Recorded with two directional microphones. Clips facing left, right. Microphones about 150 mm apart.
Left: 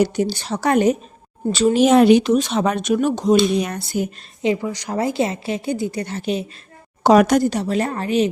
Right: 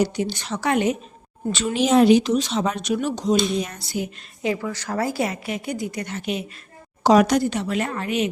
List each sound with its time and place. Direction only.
0.2 s speech: 35° left (ahead or behind)
1.8 s speech: 60° left (ahead or behind)
4.4 s a woman's voice: 20° left (ahead or behind)
7.0 s speech: 55° left (ahead or behind); by 8.3 s 35° left (ahead or behind)